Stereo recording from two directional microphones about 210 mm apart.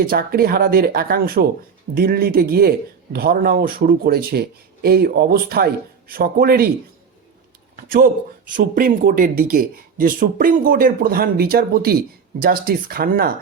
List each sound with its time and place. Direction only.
0.0 s speech: 45° right (ahead or behind)
7.8 s speech: 45° right (ahead or behind)